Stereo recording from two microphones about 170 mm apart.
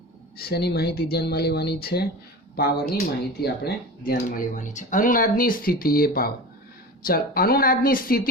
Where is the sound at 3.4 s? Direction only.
65° left (ahead or behind).